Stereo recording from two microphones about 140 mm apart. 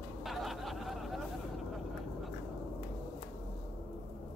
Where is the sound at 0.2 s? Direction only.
Centre (ahead or behind).